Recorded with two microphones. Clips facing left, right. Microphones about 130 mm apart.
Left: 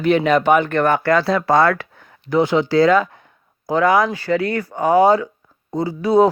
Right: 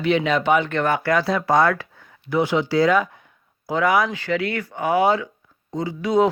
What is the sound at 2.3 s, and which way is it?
Speech, 50° left (ahead or behind).